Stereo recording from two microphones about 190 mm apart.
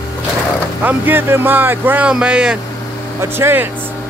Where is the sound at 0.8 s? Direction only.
10° right (ahead or behind).